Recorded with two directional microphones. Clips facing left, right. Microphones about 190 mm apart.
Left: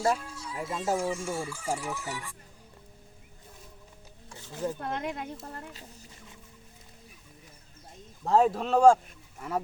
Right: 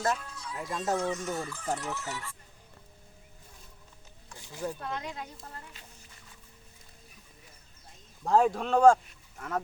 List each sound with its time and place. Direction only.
0.0 s speech: 10° left (ahead or behind)
4.4 s a sound: 15° right (ahead or behind)
4.8 s speech: 50° left (ahead or behind)
8.2 s speech: centre (ahead or behind)